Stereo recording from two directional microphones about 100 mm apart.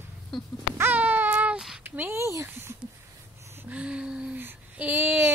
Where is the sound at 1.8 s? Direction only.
20° right (ahead or behind).